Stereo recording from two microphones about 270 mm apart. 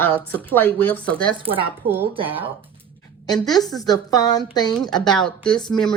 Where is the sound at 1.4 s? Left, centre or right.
Centre.